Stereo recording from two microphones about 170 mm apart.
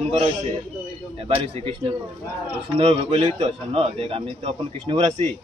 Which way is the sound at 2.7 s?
35° right (ahead or behind).